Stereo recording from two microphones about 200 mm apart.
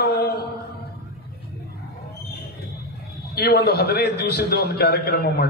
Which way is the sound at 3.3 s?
50° left (ahead or behind).